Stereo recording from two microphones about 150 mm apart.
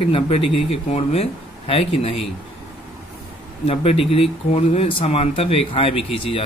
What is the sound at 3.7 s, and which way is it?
Speech, 40° left (ahead or behind).